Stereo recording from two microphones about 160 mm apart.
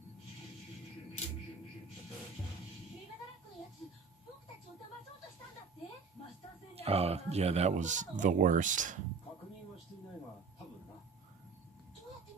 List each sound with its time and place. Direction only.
6.7 s speech: 40° right (ahead or behind)